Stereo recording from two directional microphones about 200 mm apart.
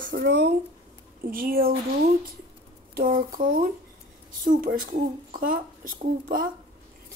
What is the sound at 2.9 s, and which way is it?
A woman's voice, 45° right (ahead or behind).